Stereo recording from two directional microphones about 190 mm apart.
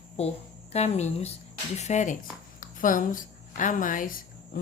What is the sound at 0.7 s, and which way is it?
A woman's voice, 35° left (ahead or behind).